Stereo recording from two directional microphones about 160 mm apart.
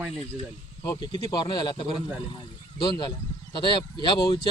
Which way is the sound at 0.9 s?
25° left (ahead or behind).